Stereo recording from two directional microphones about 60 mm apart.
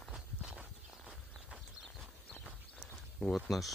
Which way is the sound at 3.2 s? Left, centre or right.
Centre.